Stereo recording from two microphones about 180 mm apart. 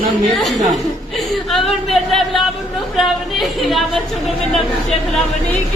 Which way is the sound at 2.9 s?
Centre (ahead or behind).